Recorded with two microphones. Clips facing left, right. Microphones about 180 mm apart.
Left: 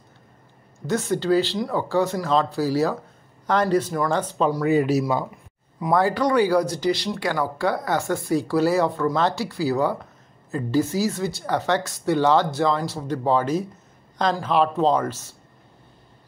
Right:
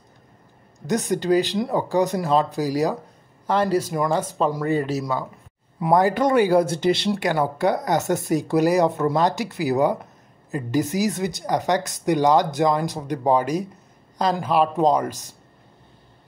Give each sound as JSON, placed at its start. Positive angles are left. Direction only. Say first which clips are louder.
{"t": 0.8, "sound": "speech", "louder": "right 1 dB", "side_deg": -15}
{"t": 4.6, "sound": "speech", "louder": "left 3 dB", "side_deg": 10}
{"t": 5.8, "sound": "speech", "louder": "right 2 dB", "side_deg": -20}